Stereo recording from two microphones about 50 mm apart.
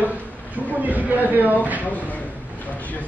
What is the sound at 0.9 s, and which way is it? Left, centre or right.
Speech, right.